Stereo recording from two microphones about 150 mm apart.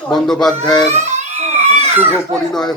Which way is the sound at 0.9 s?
50° right (ahead or behind).